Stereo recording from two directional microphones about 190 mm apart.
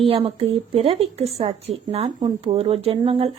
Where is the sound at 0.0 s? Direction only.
30° right (ahead or behind).